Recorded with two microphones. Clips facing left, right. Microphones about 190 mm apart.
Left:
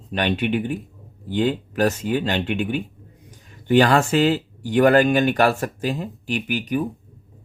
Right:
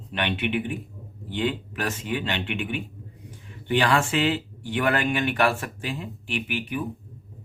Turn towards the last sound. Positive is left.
turn(degrees=40)  # may be behind; listen again after turning